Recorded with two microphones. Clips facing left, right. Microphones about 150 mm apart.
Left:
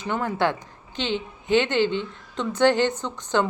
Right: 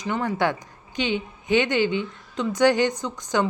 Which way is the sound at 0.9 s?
15° right (ahead or behind).